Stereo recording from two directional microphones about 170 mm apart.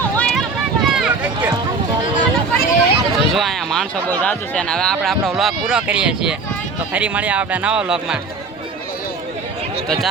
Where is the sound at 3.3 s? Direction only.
Centre (ahead or behind).